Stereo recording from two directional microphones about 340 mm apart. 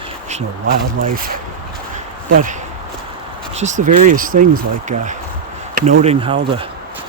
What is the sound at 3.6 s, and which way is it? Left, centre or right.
Speech, right.